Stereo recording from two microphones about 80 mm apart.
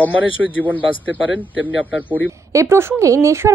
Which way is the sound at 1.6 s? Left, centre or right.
Left.